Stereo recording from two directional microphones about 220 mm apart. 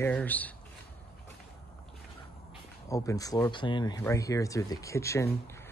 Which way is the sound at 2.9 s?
15° left (ahead or behind).